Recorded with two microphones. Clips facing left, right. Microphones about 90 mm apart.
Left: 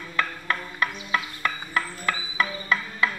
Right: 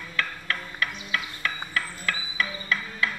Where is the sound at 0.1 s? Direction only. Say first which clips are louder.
Left 3 dB; 25° left (ahead or behind).